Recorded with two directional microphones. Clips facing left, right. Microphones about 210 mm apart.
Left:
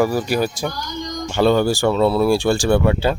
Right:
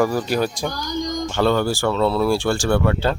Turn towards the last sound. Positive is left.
turn(degrees=10)  # may be behind; listen again after turning